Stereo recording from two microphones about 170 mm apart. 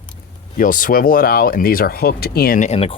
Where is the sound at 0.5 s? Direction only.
55° left (ahead or behind).